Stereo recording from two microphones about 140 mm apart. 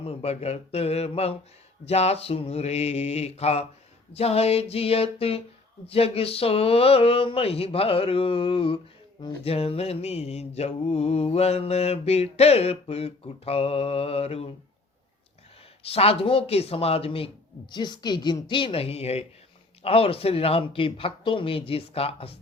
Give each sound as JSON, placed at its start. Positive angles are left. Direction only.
{"t": 0.0, "sound": "mantra", "side_deg": 45}
{"t": 15.8, "sound": "mantra", "side_deg": 45}